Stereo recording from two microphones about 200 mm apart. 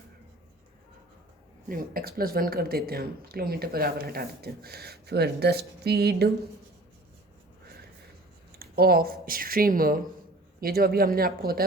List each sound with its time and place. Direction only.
1.6 s speech: 45° right (ahead or behind)
8.5 s speech: 50° right (ahead or behind)